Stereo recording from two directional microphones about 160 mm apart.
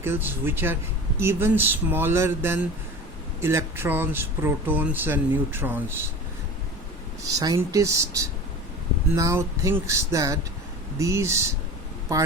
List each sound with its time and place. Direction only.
0.0 s speech: 15° right (ahead or behind)
7.2 s speech: 20° right (ahead or behind)